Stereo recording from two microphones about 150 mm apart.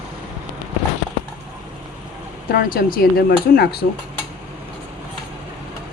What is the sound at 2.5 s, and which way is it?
Speech, 75° left (ahead or behind).